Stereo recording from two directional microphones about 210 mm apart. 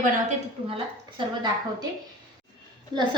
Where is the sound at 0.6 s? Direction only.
25° right (ahead or behind).